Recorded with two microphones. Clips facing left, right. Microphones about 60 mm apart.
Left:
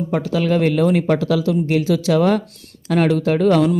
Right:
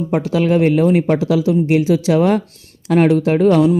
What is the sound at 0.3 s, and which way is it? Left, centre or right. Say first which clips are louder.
Speech: right 3 dB; right.